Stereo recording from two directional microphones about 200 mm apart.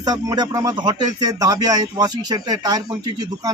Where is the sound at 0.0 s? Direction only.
20° right (ahead or behind).